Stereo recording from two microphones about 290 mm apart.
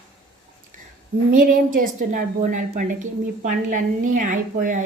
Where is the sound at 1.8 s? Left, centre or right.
Right.